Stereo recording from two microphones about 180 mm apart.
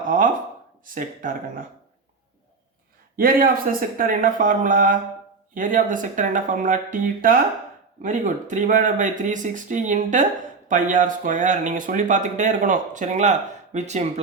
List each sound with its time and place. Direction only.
0.9 s speech: 50° right (ahead or behind)
3.2 s speech: 50° right (ahead or behind)